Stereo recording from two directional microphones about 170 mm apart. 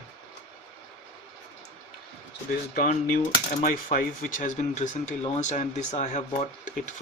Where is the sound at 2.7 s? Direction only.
50° left (ahead or behind).